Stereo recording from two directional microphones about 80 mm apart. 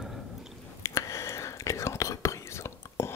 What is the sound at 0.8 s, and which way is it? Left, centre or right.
Whispering, left.